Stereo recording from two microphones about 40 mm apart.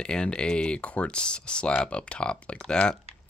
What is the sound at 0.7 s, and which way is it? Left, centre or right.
Speech, left.